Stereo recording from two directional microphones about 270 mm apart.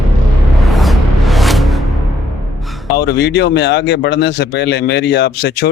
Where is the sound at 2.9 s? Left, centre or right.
Left.